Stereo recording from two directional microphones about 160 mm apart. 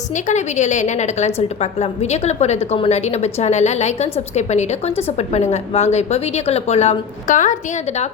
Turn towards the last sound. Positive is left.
turn(degrees=50)  # may be behind; listen again after turning